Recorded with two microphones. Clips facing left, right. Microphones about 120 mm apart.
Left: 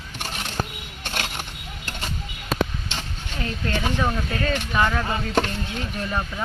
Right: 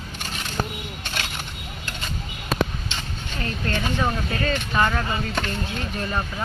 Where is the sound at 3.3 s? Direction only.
10° left (ahead or behind).